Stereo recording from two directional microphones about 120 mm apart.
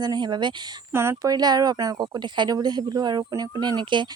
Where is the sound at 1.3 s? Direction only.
35° right (ahead or behind).